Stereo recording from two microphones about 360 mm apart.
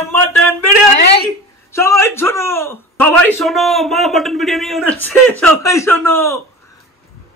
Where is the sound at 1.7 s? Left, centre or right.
Centre.